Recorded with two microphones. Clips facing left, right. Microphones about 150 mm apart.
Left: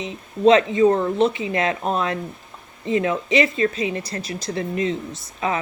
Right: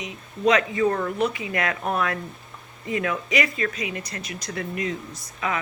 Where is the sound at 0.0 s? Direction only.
25° left (ahead or behind).